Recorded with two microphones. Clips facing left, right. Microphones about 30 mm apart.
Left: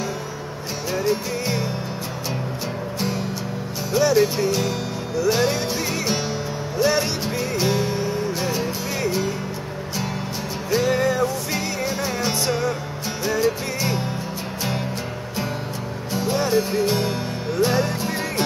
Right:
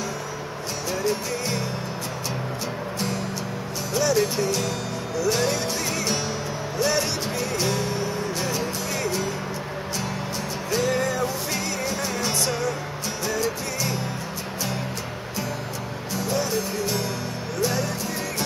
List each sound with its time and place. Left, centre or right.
0.9 s music: centre
3.9 s speech: centre
5.2 s music: centre
10.7 s music: centre
16.2 s music: left